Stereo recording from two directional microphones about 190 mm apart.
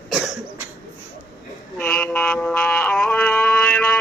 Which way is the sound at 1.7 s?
5° left (ahead or behind).